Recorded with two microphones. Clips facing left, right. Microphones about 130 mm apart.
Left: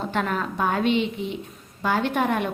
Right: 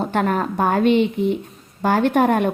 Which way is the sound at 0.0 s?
50° right (ahead or behind).